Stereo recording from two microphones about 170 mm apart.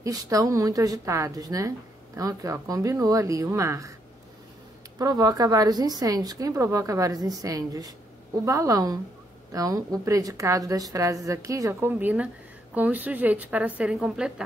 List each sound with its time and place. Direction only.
0.0 s a woman's voice: 20° right (ahead or behind)
4.9 s a woman's voice: 20° right (ahead or behind); by 14.3 s 5° right (ahead or behind)